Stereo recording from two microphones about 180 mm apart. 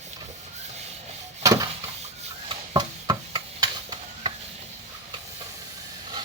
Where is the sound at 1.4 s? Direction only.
20° right (ahead or behind).